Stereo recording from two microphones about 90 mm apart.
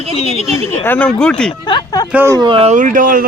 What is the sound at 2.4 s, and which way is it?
Speech, 85° right.